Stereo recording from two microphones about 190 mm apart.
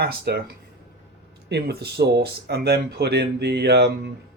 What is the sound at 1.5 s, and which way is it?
Speech, 60° right (ahead or behind).